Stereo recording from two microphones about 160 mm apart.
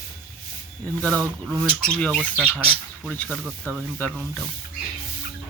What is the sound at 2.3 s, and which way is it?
Speech, 10° right (ahead or behind).